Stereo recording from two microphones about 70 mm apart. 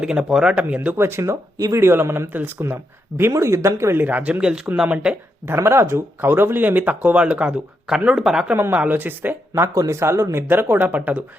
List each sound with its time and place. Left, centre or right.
0.0 s speech: centre
0.8 s a man's voice: right
1.2 s speech: right
1.8 s a man's voice: right
3.3 s speech: right
4.0 s speech: right
5.5 s speech: right; by 8.4 s centre
8.5 s a man's voice: right
9.7 s a man's voice: right
10.0 s a man's voice: right